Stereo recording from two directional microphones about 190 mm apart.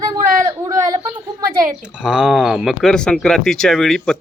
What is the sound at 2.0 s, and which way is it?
Speech, 5° right (ahead or behind).